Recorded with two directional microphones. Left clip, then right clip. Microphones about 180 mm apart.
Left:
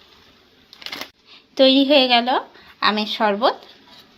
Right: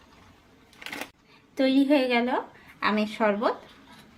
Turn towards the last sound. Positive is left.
turn(degrees=25)  # may be behind; listen again after turning